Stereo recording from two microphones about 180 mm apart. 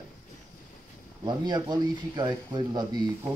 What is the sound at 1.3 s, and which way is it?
Speech, 25° right (ahead or behind).